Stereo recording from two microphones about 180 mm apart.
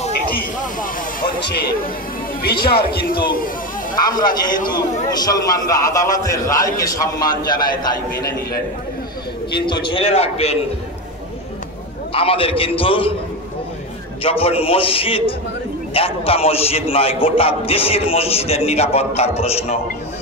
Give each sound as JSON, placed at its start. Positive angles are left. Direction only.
{"t": 1.4, "sound": "speech", "side_deg": 60}
{"t": 4.2, "sound": "a man's voice", "side_deg": 25}
{"t": 8.1, "sound": "speech", "side_deg": 60}
{"t": 9.7, "sound": "a man's voice", "side_deg": 30}
{"t": 12.1, "sound": "a man's voice", "side_deg": 30}
{"t": 14.2, "sound": "a man's voice", "side_deg": 30}